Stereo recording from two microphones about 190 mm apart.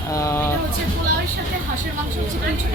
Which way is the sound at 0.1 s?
15° left (ahead or behind).